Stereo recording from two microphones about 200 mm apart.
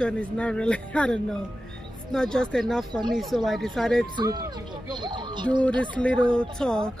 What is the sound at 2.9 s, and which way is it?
Speech, 20° right (ahead or behind).